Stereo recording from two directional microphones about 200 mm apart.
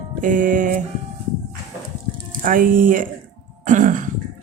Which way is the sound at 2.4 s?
45° right (ahead or behind).